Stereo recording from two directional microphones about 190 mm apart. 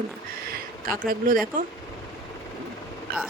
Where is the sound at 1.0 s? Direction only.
50° right (ahead or behind).